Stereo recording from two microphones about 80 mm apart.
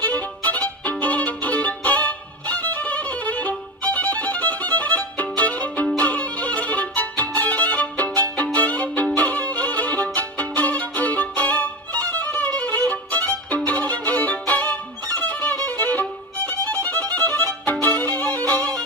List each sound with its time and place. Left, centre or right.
0.0 s violin: left
5.9 s music: centre
8.5 s violin: centre
18.5 s music: left